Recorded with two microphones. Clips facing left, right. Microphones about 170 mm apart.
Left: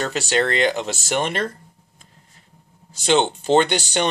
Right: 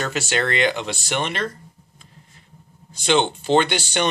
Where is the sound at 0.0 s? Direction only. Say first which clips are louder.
Left 2 dB; 35° left (ahead or behind).